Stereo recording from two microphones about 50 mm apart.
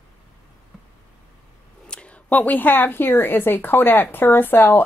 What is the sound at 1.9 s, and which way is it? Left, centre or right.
Speech, left.